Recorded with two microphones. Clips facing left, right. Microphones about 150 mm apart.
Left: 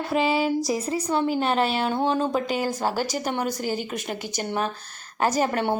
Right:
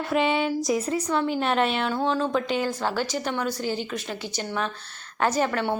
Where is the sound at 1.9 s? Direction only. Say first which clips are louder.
Left 1 dB; 20° left (ahead or behind).